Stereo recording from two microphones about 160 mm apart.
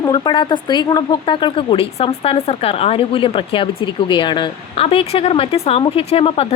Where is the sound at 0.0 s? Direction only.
25° left (ahead or behind).